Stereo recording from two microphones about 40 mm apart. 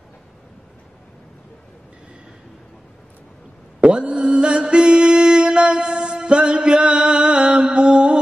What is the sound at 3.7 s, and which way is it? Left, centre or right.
Mantra, right.